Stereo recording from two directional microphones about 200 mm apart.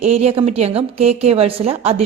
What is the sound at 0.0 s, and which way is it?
A woman's voice, 30° right (ahead or behind).